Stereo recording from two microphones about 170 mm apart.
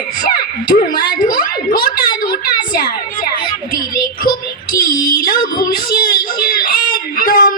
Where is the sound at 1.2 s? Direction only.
60° left (ahead or behind).